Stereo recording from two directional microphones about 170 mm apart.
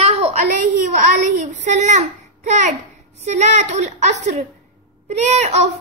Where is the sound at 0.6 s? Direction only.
50° right (ahead or behind).